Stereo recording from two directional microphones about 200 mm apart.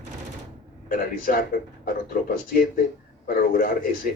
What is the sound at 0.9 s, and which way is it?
Speech, 45° left (ahead or behind).